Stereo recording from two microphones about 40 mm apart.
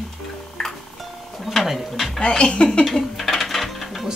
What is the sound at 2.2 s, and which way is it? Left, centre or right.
Speech, left.